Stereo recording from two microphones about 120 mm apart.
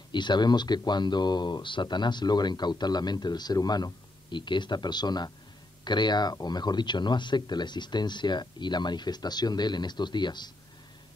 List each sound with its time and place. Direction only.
0.1 s speech: 40° left (ahead or behind)